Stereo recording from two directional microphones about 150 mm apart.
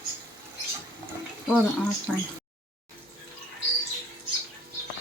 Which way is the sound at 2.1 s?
Centre (ahead or behind).